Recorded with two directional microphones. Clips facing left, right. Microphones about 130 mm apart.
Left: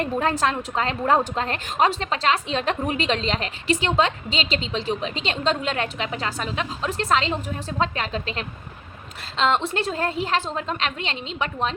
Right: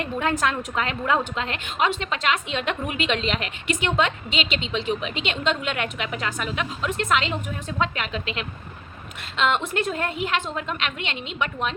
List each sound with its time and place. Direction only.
0.0 s a woman's voice: 35° left (ahead or behind)